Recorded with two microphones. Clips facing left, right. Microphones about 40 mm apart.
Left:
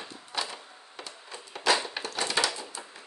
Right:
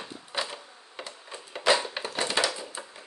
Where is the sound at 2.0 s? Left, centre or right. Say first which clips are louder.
Right 1 dB; right.